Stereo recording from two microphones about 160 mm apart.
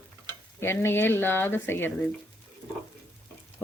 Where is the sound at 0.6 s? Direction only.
15° left (ahead or behind).